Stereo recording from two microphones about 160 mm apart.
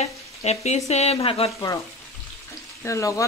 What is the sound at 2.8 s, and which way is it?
Speech, 20° left (ahead or behind).